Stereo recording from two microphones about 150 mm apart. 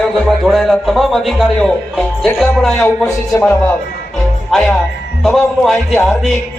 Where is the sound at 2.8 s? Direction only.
15° left (ahead or behind).